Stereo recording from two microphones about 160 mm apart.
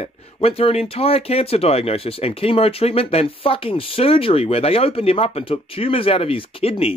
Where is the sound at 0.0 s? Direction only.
40° left (ahead or behind).